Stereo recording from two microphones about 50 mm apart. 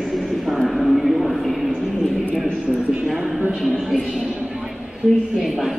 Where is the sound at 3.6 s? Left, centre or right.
Centre.